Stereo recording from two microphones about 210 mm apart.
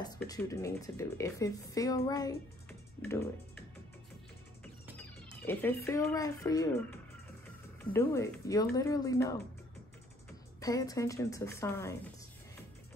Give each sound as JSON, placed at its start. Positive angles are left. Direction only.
{"t": 0.0, "sound": "speech", "side_deg": 20}
{"t": 5.5, "sound": "speech", "side_deg": 10}
{"t": 10.6, "sound": "speech", "side_deg": 15}